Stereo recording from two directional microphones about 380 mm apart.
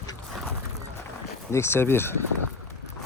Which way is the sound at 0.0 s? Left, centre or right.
Centre.